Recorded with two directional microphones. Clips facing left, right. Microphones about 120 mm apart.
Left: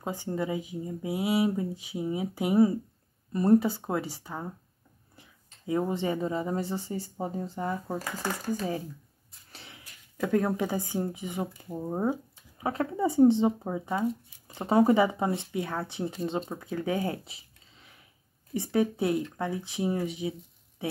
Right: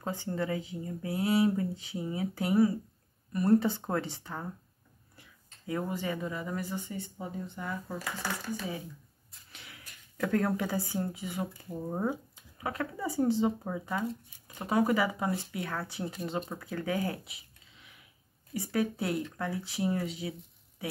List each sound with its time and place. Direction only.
0.0 s speech: 15° left (ahead or behind)
3.5 s speech: 5° left (ahead or behind); by 8.0 s 30° left (ahead or behind)
8.0 s speech: 45° left (ahead or behind)
9.5 s speech: 30° left (ahead or behind)